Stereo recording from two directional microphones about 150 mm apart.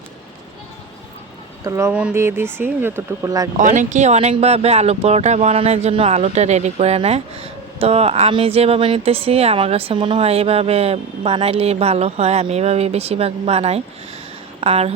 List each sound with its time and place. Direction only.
1.6 s speech: 20° right (ahead or behind)
1.9 s speech: 5° right (ahead or behind); by 3.5 s 25° right (ahead or behind)
3.6 s speech: 55° right (ahead or behind)